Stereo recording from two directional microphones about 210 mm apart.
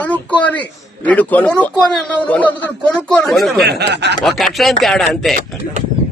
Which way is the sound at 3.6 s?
50° right (ahead or behind).